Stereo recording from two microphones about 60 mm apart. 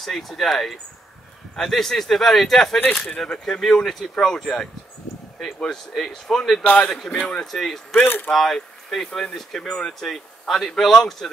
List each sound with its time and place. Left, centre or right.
0.0 s speech: centre
6.6 s a man's voice: centre
7.9 s speech: left
8.3 s speech: centre